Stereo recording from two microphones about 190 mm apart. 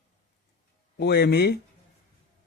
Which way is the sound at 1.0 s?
60° left (ahead or behind).